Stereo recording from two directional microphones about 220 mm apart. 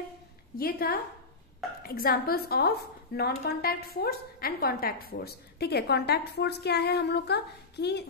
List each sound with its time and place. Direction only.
0.6 s a woman's voice: 45° left (ahead or behind)